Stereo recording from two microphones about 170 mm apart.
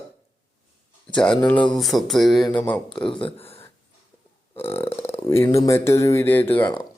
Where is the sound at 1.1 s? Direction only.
5° left (ahead or behind).